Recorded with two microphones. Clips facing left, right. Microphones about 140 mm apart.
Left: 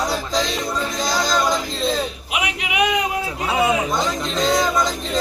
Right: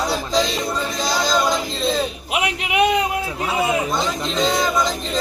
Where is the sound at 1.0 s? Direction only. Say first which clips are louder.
Right 1 dB; 5° right (ahead or behind).